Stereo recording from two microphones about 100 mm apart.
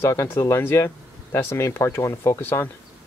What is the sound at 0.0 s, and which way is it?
Speech, 30° left (ahead or behind).